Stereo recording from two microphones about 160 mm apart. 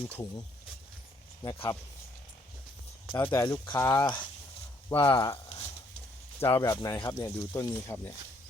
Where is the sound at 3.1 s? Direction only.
30° left (ahead or behind).